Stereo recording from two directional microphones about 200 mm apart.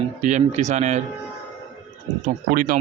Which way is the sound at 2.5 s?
45° right (ahead or behind).